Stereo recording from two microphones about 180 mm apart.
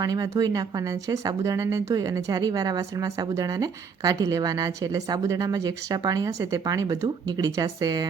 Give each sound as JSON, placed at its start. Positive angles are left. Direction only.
{"t": 0.0, "sound": "speech", "side_deg": -20}